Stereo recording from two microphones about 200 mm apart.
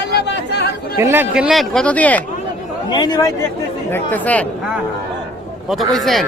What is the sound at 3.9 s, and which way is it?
Speech, 10° left (ahead or behind).